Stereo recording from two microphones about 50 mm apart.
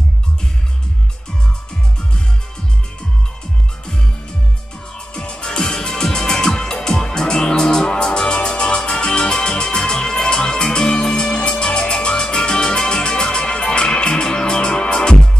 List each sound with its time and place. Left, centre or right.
4.9 s music: centre